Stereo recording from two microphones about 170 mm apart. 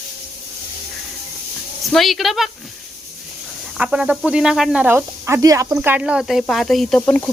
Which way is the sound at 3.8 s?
5° right (ahead or behind).